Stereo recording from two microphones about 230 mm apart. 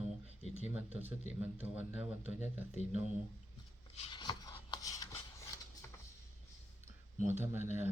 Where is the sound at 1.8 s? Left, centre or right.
Centre.